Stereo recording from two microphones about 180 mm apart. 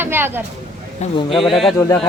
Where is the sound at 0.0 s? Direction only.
10° right (ahead or behind).